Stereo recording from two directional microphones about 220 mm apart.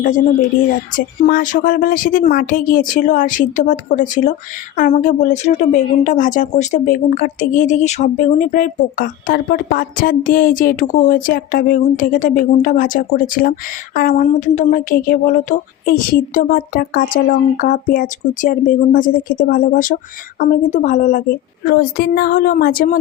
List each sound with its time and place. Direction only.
0.9 s speech: 40° left (ahead or behind)